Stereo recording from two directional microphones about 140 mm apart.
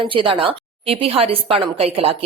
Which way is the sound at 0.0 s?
35° right (ahead or behind).